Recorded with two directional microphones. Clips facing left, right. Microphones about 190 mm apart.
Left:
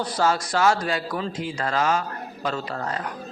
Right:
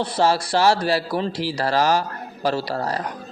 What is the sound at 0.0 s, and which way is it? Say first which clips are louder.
Speech: right 3 dB; 30° right (ahead or behind).